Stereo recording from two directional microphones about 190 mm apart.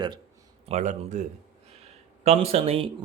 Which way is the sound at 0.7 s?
40° right (ahead or behind).